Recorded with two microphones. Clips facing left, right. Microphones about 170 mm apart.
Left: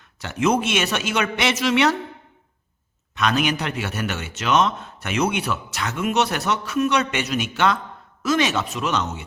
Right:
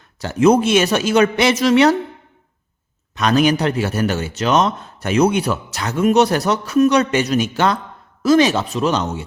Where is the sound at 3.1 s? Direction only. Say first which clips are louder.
Right 6 dB; 35° right (ahead or behind).